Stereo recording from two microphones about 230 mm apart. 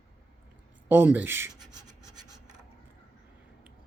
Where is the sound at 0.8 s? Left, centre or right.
Centre.